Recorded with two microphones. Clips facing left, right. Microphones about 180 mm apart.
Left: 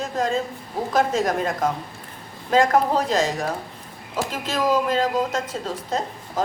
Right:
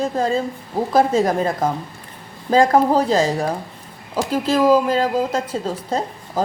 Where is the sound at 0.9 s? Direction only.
30° right (ahead or behind).